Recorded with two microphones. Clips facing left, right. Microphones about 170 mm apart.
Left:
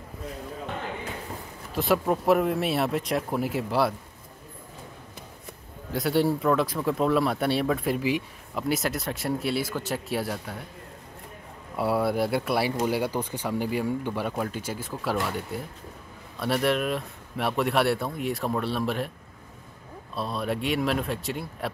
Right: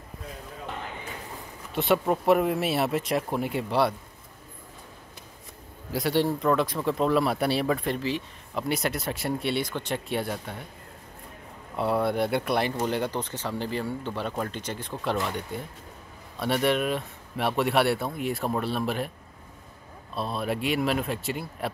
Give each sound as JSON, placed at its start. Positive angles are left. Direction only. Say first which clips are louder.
{"t": 1.7, "sound": "speech", "louder": "even", "side_deg": 0}
{"t": 5.9, "sound": "speech", "louder": "left 1 dB", "side_deg": 0}
{"t": 11.7, "sound": "speech", "louder": "even", "side_deg": 5}
{"t": 20.2, "sound": "speech", "louder": "even", "side_deg": 0}